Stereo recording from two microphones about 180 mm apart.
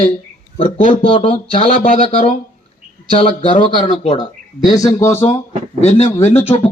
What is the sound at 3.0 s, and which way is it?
Speech, 30° left (ahead or behind).